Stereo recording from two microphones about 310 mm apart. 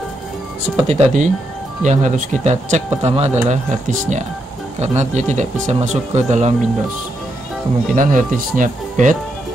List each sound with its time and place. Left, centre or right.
0.8 s speech: right
7.9 s speech: right